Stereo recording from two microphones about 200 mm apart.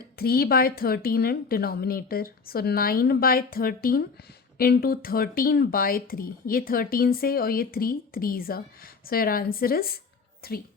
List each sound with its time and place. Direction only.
0.2 s speech: 50° left (ahead or behind)